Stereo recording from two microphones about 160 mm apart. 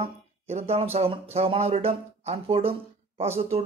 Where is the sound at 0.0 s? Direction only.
40° right (ahead or behind).